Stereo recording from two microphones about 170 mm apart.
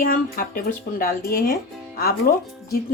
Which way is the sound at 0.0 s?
55° left (ahead or behind).